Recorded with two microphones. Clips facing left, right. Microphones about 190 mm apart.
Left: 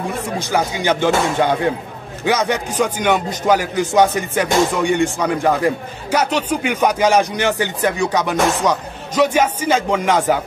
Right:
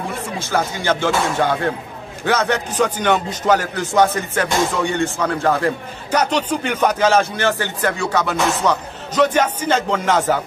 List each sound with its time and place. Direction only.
0.2 s speech: 15° left (ahead or behind)